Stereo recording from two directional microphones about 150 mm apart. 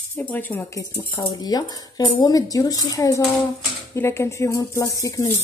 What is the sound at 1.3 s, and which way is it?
Speech, 25° left (ahead or behind).